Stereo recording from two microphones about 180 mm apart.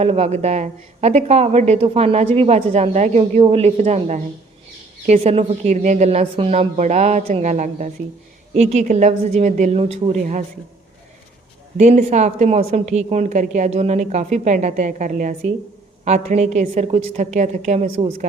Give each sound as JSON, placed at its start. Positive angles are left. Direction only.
{"t": 0.0, "sound": "speech", "side_deg": -35}
{"t": 11.8, "sound": "speech", "side_deg": -40}